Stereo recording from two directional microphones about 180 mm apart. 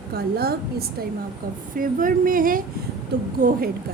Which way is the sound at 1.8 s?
50° right (ahead or behind).